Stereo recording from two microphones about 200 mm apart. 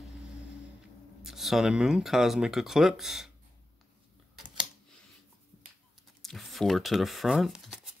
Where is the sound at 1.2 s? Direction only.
Centre (ahead or behind).